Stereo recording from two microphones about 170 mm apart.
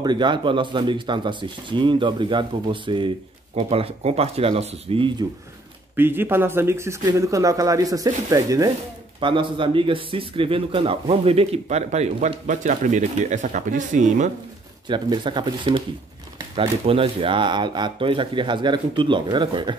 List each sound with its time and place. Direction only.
0.0 s a man's voice: 25° right (ahead or behind)
5.9 s a man's voice: 10° right (ahead or behind); by 14.3 s 45° right (ahead or behind)
14.9 s speech: 30° right (ahead or behind)